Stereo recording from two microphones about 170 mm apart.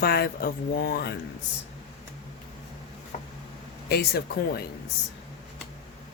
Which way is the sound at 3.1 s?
45° left (ahead or behind).